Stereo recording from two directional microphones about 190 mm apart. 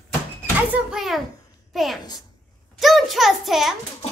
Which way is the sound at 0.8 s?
Centre (ahead or behind).